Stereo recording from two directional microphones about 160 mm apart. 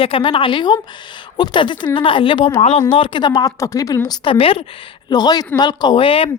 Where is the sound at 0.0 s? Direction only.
35° left (ahead or behind).